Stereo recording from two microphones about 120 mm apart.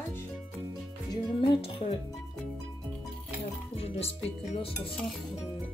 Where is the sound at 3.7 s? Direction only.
55° left (ahead or behind).